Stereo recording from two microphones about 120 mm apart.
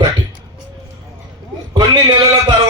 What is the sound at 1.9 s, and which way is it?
Speech, 35° right (ahead or behind).